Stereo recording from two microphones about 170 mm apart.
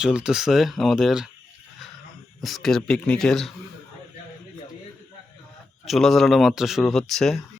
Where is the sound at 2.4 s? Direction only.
Centre (ahead or behind).